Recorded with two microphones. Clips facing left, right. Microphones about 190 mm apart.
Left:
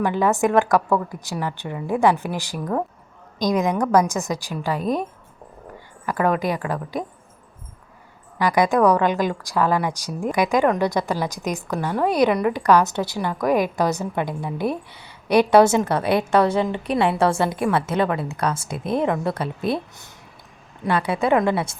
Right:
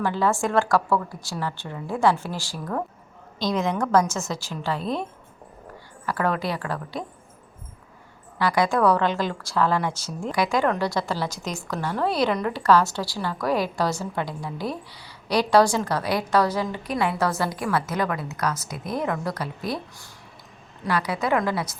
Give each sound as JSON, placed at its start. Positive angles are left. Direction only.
{"t": 0.0, "sound": "a woman's voice", "side_deg": 15}
{"t": 6.1, "sound": "a woman's voice", "side_deg": 15}
{"t": 8.4, "sound": "a woman's voice", "side_deg": 15}